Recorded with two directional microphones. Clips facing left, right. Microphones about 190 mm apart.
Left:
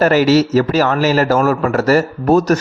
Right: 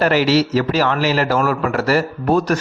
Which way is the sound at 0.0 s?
45° left (ahead or behind).